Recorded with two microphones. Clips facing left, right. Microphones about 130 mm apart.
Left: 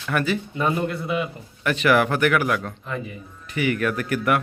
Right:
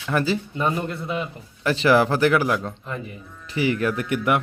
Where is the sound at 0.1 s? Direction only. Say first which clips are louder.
Right 1 dB; 25° right (ahead or behind).